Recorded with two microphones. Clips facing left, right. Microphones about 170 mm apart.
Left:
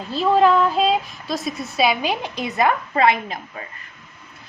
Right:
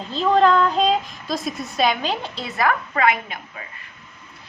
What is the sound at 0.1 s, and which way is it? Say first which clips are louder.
A woman's voice: left 1 dB; 10° left (ahead or behind).